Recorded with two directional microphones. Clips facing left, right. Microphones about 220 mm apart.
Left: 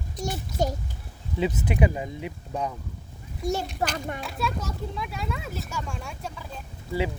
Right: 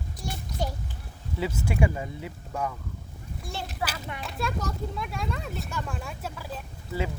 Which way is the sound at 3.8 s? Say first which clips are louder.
Left 2 dB; 45° left (ahead or behind).